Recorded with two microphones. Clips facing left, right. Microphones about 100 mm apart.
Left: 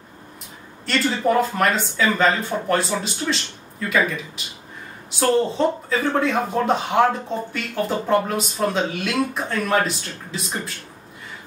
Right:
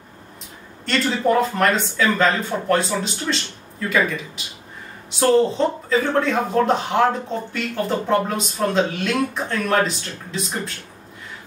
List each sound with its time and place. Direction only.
0.8 s speech: centre (ahead or behind)
5.2 s speech: centre (ahead or behind)